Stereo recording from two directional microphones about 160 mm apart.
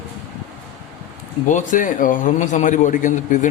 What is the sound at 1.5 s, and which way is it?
A man's voice, 55° left (ahead or behind).